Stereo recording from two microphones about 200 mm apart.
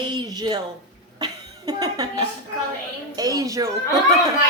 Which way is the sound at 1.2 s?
20° right (ahead or behind).